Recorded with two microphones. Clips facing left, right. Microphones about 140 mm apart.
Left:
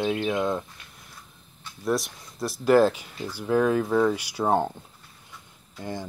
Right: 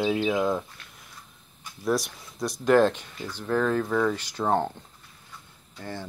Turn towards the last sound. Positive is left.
turn(degrees=15)  # may be behind; listen again after turning